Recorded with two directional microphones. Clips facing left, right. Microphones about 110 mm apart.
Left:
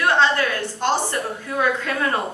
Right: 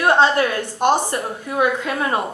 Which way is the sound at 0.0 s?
20° right (ahead or behind).